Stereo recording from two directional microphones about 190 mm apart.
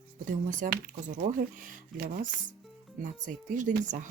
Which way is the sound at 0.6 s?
45° right (ahead or behind).